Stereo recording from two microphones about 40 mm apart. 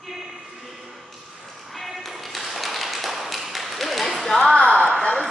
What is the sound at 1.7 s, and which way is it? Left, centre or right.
Tap, centre.